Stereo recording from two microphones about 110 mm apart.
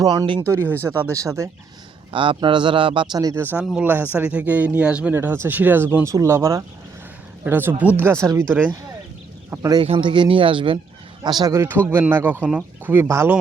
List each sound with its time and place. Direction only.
0.0 s speech: 35° right (ahead or behind)
0.4 s speech: 25° right (ahead or behind)
2.1 s speech: 50° right (ahead or behind)
3.3 s speech: 20° right (ahead or behind)
5.1 s speech: 20° right (ahead or behind)
9.5 s speech: 30° right (ahead or behind)
10.0 s speech: 45° right (ahead or behind)
11.2 s speech: 40° right (ahead or behind); by 13.1 s 15° right (ahead or behind)